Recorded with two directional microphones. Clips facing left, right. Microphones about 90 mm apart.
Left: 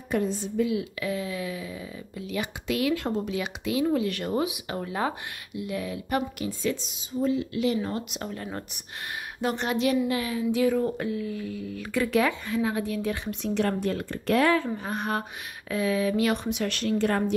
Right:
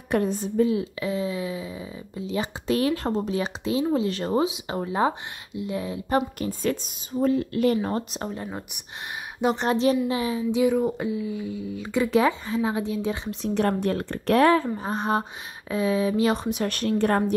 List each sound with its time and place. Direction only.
0.1 s speech: 55° right (ahead or behind); by 8.3 s 35° right (ahead or behind)
8.5 s speech: 10° right (ahead or behind)
9.6 s speech: 30° right (ahead or behind)
13.7 s speech: 50° right (ahead or behind)
14.5 s speech: 35° right (ahead or behind)